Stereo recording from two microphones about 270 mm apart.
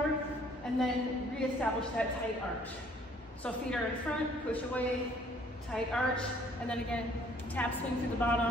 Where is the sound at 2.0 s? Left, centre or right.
Centre.